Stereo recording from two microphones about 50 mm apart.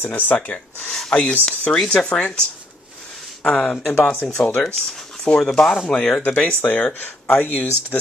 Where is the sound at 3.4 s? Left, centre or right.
Left.